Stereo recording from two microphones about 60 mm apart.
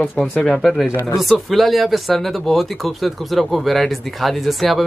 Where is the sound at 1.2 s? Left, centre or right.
Centre.